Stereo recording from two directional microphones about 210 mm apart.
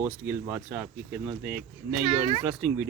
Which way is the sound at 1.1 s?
45° right (ahead or behind).